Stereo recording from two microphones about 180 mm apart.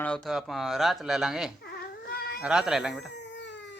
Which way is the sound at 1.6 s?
60° left (ahead or behind).